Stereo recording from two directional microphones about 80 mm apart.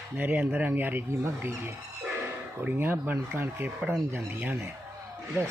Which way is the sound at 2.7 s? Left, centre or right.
Right.